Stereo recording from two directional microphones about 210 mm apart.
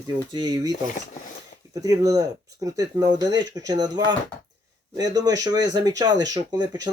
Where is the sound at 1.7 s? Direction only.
15° right (ahead or behind).